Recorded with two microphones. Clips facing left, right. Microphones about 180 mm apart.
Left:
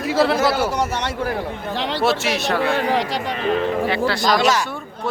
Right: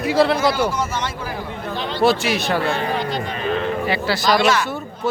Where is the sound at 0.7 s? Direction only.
70° left (ahead or behind).